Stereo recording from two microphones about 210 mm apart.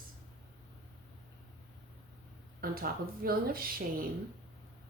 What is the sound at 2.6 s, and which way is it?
Speech, 45° right (ahead or behind).